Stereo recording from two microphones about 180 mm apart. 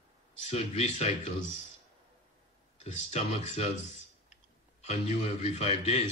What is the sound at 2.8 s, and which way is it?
Speech, 35° left (ahead or behind).